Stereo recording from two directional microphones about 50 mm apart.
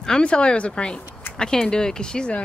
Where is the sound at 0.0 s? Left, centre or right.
Centre.